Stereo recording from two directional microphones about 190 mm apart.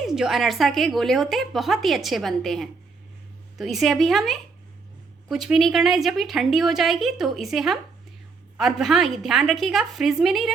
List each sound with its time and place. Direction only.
0.0 s a woman's voice: centre (ahead or behind)